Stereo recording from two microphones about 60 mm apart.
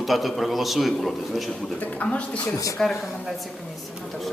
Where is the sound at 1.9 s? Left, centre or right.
Left.